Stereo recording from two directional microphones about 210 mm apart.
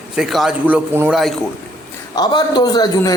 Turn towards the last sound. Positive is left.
turn(degrees=20)  # may be behind; listen again after turning